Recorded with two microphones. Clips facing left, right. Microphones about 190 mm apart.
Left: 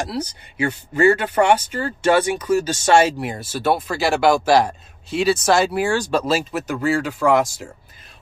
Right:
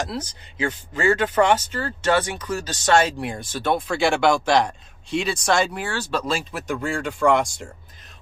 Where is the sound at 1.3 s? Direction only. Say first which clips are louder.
Left 2 dB; 10° left (ahead or behind).